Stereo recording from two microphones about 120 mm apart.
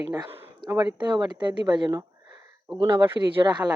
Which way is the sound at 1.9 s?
25° right (ahead or behind).